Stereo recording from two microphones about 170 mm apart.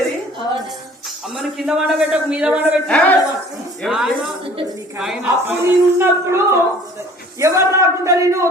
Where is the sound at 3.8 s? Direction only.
Centre (ahead or behind).